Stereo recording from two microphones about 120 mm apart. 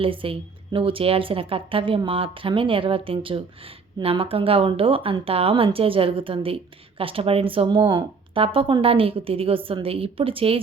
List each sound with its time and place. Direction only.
0.0 s speech: 50° right (ahead or behind)